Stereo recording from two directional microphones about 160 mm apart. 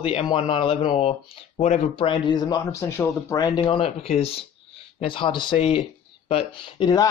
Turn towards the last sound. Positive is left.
turn(degrees=25)  # may be behind; listen again after turning